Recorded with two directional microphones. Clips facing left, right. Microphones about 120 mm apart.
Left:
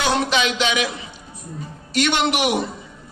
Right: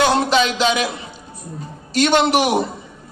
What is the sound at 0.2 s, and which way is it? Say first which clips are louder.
Speech: right 4 dB; 35° right (ahead or behind).